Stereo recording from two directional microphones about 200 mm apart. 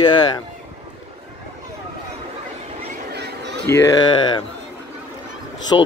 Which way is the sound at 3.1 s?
60° right (ahead or behind).